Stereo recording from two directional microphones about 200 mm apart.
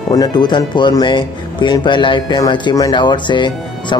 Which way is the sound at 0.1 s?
20° left (ahead or behind).